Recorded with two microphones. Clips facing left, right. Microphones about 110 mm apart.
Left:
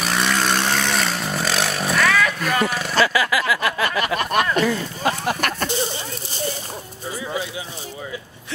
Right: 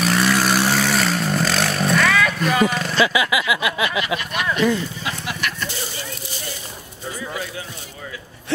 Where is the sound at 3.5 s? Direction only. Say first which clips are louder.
Even; 5° right (ahead or behind).